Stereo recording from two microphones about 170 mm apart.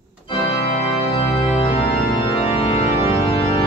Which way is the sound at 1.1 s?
35° left (ahead or behind).